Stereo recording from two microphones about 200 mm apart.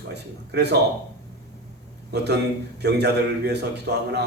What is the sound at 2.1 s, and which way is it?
A man's voice, 55° right (ahead or behind).